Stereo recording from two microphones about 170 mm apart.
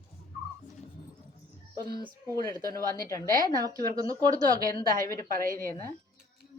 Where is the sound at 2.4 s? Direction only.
20° left (ahead or behind).